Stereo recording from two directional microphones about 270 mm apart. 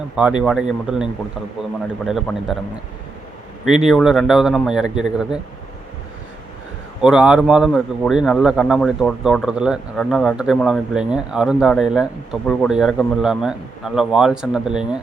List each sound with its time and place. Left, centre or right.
0.2 s speech: centre
3.7 s speech: centre
7.0 s speech: centre